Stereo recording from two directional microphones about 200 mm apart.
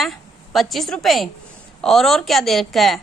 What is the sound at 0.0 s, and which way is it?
A woman's voice, centre (ahead or behind).